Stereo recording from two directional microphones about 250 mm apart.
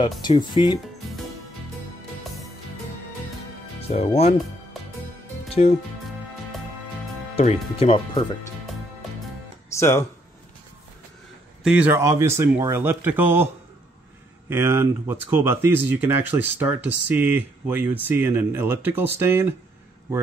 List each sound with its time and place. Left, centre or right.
0.2 s speech: centre
3.9 s speech: left
5.5 s speech: left
7.3 s speech: left
9.8 s speech: centre
11.6 s speech: centre
14.5 s speech: centre